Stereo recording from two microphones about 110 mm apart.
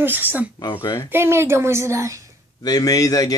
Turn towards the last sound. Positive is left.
turn(degrees=30)  # may be behind; listen again after turning